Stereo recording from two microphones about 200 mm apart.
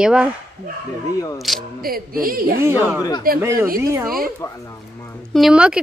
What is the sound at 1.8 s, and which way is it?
Speech, 45° right (ahead or behind).